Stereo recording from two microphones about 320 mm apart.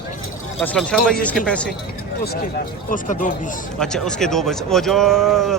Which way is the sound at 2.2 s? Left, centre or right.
Left.